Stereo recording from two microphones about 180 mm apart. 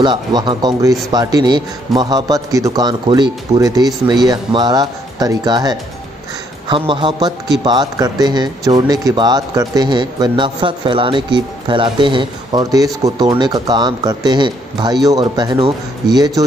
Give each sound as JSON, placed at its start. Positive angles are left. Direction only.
{"t": 0.0, "sound": "speech", "side_deg": -25}